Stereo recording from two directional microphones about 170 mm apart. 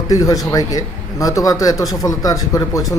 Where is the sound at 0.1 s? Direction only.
20° left (ahead or behind).